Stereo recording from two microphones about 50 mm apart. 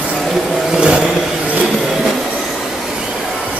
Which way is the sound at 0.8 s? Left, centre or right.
Centre.